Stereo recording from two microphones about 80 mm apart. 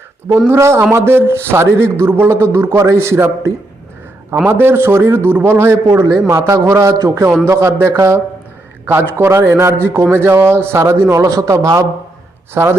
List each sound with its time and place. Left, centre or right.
0.5 s a man's voice: right
6.1 s a man's voice: right
11.2 s a man's voice: right